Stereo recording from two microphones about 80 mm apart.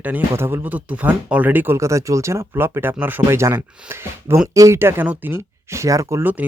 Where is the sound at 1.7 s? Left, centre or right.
Right.